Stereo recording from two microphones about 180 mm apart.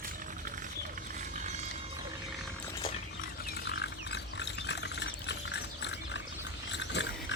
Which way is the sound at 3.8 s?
70° left (ahead or behind).